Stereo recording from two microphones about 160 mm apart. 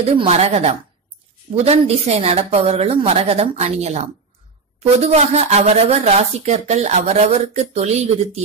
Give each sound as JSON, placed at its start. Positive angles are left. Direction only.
{"t": 0.2, "sound": "a woman's voice", "side_deg": -40}